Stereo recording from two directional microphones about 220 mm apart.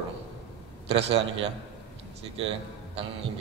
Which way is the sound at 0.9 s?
30° right (ahead or behind).